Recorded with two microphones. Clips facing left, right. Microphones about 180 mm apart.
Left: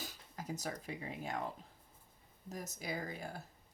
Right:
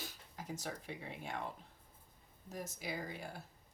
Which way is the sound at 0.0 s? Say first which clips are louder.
Left 2 dB; 40° left (ahead or behind).